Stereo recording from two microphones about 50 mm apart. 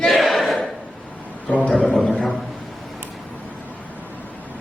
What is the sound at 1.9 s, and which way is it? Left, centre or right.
Speech, centre.